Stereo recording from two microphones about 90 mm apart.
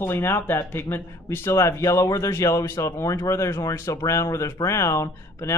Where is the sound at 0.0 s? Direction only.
25° left (ahead or behind).